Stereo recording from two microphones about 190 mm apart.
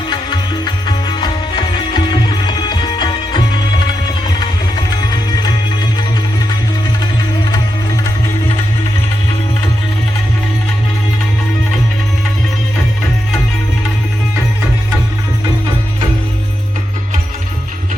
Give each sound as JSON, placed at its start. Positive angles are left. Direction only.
{"t": 0.1, "sound": "music", "side_deg": 25}